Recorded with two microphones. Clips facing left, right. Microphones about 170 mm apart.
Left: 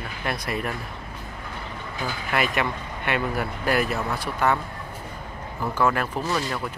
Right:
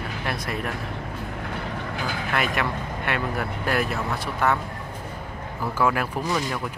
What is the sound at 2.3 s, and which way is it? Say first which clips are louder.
Speech: left 2 dB; centre (ahead or behind).